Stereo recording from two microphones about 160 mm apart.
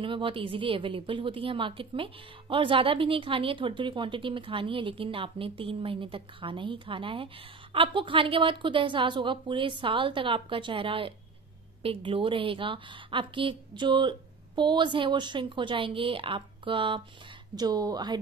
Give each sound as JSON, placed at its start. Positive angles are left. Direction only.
{"t": 0.0, "sound": "a woman's voice", "side_deg": -30}